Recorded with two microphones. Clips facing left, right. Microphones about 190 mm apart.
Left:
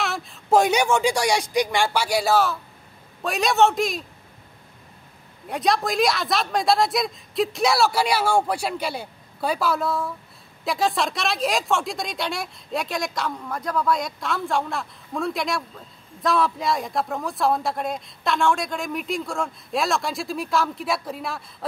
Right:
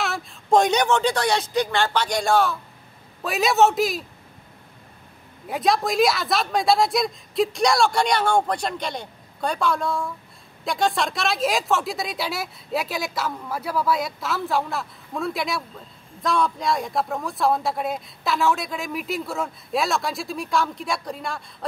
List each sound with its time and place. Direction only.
0.0 s speech: centre (ahead or behind)
5.5 s speech: centre (ahead or behind)